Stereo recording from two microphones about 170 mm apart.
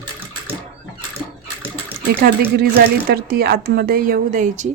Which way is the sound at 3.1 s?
65° right (ahead or behind).